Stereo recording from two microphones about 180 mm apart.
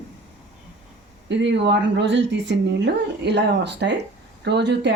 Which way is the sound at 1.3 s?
75° right (ahead or behind).